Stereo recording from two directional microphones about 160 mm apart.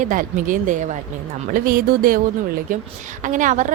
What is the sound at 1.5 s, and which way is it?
Speech, 65° right (ahead or behind).